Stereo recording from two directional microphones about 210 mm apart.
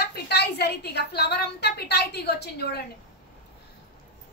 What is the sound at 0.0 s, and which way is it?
A woman's voice, 50° left (ahead or behind).